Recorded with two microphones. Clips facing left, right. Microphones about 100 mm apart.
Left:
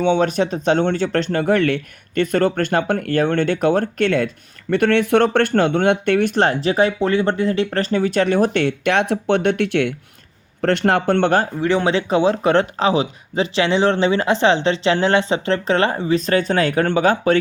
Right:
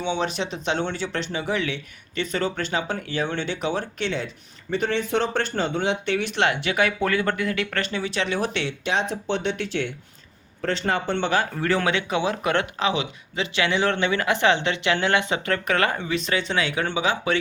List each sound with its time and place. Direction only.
0.0 s speech: 50° left (ahead or behind)
4.7 s speech: 65° left (ahead or behind)
11.6 s speech: 20° left (ahead or behind)
11.9 s speech: 35° left (ahead or behind)